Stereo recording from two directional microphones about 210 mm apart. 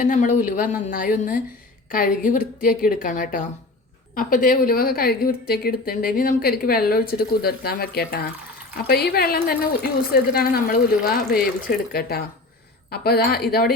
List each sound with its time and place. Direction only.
0.0 s a woman's voice: 35° left (ahead or behind)